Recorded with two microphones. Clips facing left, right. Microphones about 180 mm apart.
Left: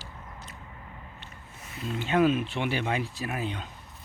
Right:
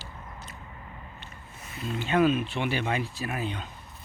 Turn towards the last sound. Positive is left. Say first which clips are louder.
# even
turn(degrees=20)  # may be behind; listen again after turning